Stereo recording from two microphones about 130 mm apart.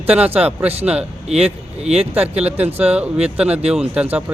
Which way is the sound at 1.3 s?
55° right (ahead or behind).